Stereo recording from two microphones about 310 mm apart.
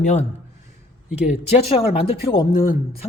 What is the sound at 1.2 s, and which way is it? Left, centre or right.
Speech, centre.